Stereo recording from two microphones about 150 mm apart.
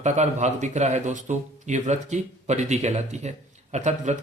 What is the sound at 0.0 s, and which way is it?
Speech, 50° right (ahead or behind).